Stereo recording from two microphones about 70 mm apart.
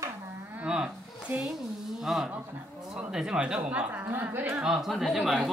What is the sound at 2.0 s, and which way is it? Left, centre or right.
Speech, centre.